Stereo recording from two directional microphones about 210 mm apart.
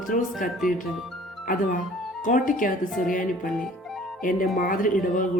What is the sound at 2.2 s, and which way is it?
Speech, 40° left (ahead or behind).